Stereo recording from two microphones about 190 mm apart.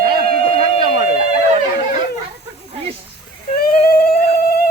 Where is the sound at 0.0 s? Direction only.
55° right (ahead or behind).